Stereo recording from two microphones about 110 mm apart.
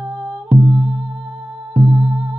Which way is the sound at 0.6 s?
10° right (ahead or behind).